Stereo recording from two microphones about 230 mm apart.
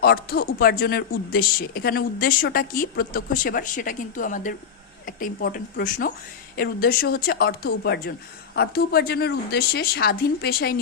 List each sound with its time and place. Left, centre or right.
0.0 s speech: left